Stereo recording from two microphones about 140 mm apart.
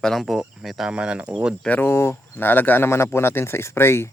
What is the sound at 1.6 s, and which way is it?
Speech, 15° left (ahead or behind).